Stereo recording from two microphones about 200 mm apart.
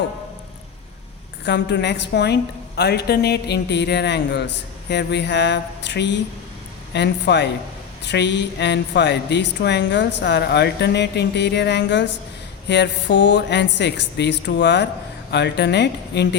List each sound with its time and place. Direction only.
1.5 s a woman's voice: 60° left (ahead or behind)